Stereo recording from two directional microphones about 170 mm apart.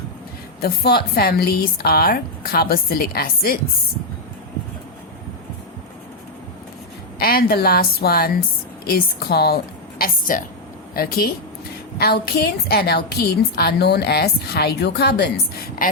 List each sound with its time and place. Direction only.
0.6 s speech: 65° left (ahead or behind)
7.2 s speech: 60° left (ahead or behind)
10.0 s a woman's voice: 50° left (ahead or behind)
10.9 s a woman's voice: 60° left (ahead or behind)